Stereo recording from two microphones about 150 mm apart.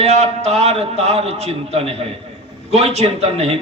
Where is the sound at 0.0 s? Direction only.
45° right (ahead or behind).